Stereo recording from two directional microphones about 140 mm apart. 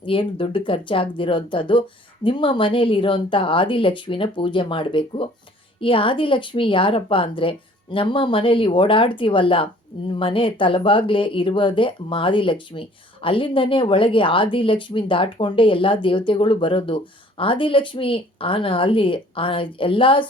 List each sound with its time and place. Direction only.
0.0 s speech: 40° left (ahead or behind)